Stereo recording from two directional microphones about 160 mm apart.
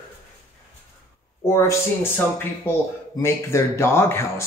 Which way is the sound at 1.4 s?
20° left (ahead or behind).